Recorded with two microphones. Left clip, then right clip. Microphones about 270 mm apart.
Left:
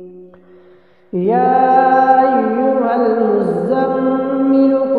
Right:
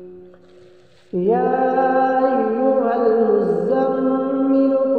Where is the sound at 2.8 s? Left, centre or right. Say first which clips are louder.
Left 2 dB; left.